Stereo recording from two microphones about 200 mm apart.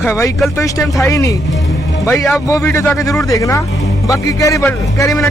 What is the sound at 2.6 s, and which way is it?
Speech, 15° left (ahead or behind).